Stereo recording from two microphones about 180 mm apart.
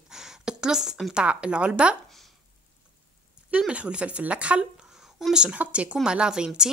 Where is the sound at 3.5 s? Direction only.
5° right (ahead or behind).